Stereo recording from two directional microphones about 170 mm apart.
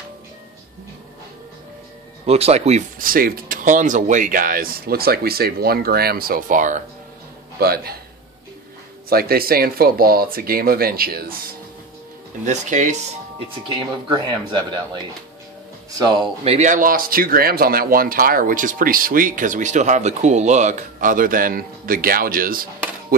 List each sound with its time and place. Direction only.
2.2 s speech: 35° right (ahead or behind)
3.0 s speech: 55° right (ahead or behind)
7.5 s speech: 65° right (ahead or behind)
9.1 s speech: 65° right (ahead or behind)
12.4 s speech: 45° right (ahead or behind)
13.7 s speech: 25° right (ahead or behind)
15.9 s speech: 25° right (ahead or behind)
16.4 s speech: 45° right (ahead or behind)